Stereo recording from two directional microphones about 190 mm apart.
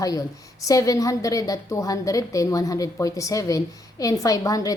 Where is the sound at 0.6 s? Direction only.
15° left (ahead or behind).